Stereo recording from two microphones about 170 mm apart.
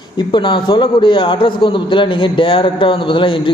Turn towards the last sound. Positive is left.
turn(degrees=30)  # may be behind; listen again after turning